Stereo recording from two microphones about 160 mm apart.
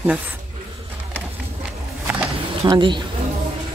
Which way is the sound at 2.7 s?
30° right (ahead or behind).